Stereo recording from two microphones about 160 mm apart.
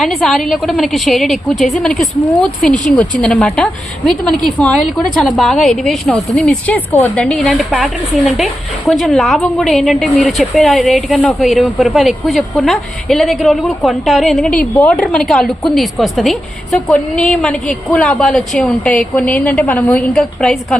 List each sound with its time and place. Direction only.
0.0 s a woman's voice: centre (ahead or behind)